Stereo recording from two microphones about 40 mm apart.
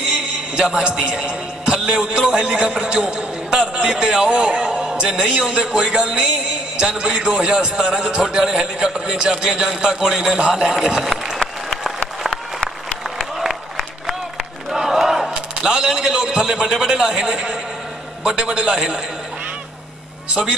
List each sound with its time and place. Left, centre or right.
1.0 s a man's voice: centre
13.0 s applause: centre
14.7 s battle cry: centre
15.3 s a sound: centre
18.2 s a man's voice: right